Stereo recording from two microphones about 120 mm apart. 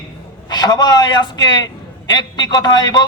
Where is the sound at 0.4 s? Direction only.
35° left (ahead or behind).